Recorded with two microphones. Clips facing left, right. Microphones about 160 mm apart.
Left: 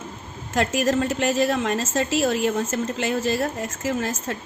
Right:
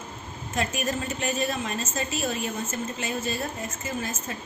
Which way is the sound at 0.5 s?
85° left.